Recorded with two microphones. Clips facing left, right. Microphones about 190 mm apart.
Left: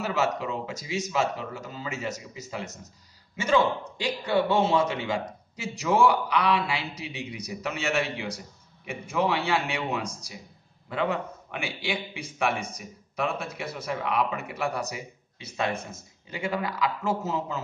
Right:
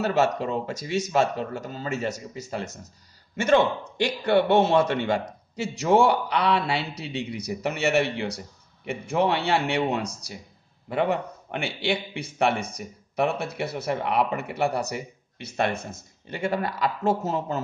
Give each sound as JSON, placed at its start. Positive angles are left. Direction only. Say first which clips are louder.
{"t": 0.0, "sound": "a man's voice", "louder": "right 4 dB", "side_deg": -65}
{"t": 3.3, "sound": "a man's voice", "louder": "right 3 dB", "side_deg": -65}